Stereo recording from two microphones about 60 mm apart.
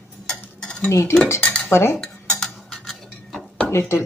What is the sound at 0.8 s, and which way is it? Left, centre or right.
Cutlery, left.